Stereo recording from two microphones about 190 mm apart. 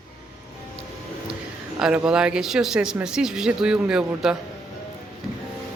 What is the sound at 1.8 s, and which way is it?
Speech, 5° right (ahead or behind).